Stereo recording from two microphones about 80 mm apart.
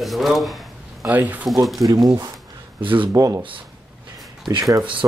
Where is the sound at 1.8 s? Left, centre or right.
Right.